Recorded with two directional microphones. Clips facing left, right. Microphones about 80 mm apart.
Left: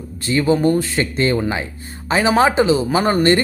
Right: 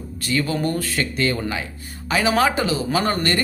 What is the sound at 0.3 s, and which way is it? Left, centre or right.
A man's voice, left.